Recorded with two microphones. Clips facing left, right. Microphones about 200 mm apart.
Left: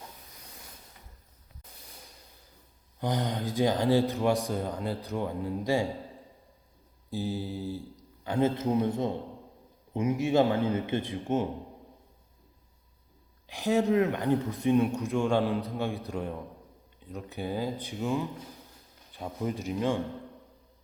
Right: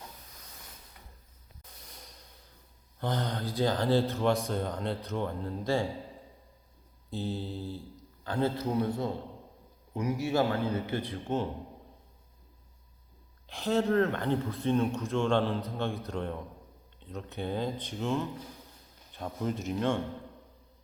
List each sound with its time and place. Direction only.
3.0 s speech: 15° left (ahead or behind)
7.1 s a man's voice: 10° left (ahead or behind)
13.5 s speech: 15° left (ahead or behind)